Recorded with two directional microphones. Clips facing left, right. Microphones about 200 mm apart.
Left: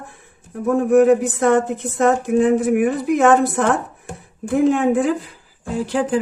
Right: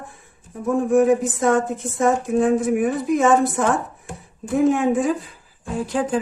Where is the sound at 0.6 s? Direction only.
65° left (ahead or behind).